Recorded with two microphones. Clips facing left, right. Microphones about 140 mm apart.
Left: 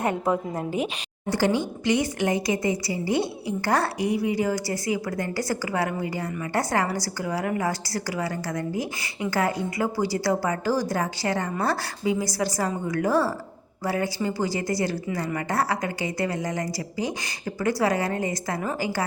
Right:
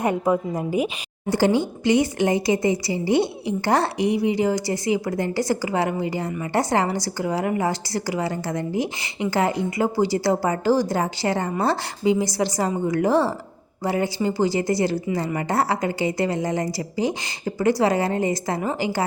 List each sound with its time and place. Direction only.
0.0 s a woman's voice: 10° right (ahead or behind)
1.3 s a woman's voice: 25° right (ahead or behind)